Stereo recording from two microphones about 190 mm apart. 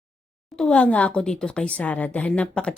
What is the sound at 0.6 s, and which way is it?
Speech, 5° left (ahead or behind).